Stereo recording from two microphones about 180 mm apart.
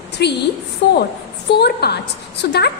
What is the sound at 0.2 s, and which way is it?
A woman's voice, 65° left (ahead or behind).